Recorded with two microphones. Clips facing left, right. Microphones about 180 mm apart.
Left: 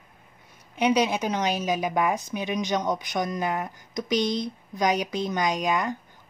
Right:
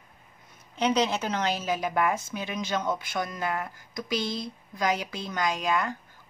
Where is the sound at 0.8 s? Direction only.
10° left (ahead or behind).